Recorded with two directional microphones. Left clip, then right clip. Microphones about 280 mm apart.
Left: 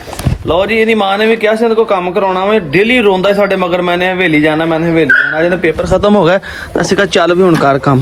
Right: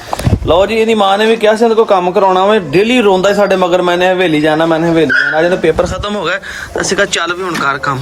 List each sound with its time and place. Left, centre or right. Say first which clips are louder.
0.4 s a man's voice: even; centre
5.9 s speech: left 8 dB; centre